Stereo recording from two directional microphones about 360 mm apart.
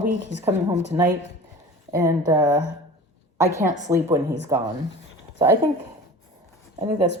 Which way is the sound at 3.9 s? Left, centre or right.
Centre.